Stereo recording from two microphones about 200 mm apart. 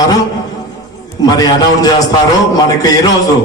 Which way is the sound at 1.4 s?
20° left (ahead or behind).